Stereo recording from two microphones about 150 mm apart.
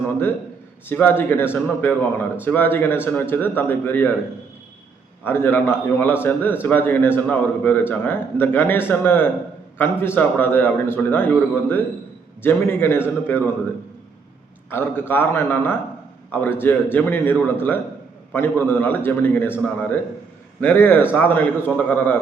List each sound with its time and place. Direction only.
0.9 s speech: 15° left (ahead or behind)
5.2 s speech: 15° left (ahead or behind)
14.7 s speech: 15° left (ahead or behind)
20.6 s speech: 15° left (ahead or behind)